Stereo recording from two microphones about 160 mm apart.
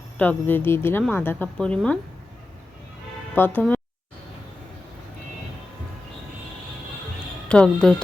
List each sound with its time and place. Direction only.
0.2 s speech: 10° left (ahead or behind)
3.3 s speech: 10° left (ahead or behind)
7.4 s a woman's voice: 5° left (ahead or behind)